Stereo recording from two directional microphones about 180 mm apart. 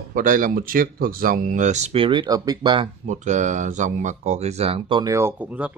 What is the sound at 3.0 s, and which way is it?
Speech, 40° right (ahead or behind).